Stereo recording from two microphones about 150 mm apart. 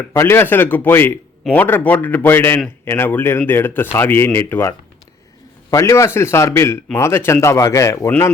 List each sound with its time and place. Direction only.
0.1 s speech: 15° left (ahead or behind)
5.7 s speech: 20° left (ahead or behind)